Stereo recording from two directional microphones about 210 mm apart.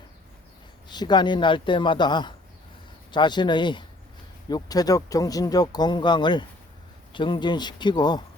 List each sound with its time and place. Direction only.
0.9 s speech: 20° left (ahead or behind)